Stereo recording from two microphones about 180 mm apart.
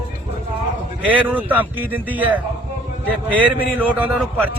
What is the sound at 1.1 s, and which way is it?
A man's voice, 10° right (ahead or behind).